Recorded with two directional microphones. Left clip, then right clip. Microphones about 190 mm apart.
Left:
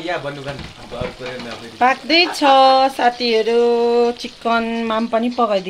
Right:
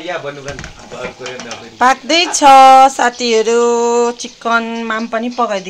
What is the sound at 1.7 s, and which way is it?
Speech, 15° right (ahead or behind).